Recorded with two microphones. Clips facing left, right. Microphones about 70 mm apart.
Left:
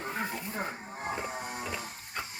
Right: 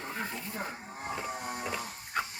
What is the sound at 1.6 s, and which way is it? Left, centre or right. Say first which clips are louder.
Printer: right 1 dB; centre.